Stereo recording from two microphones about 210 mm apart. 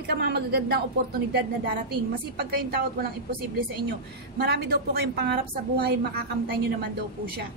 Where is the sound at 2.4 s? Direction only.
45° right (ahead or behind).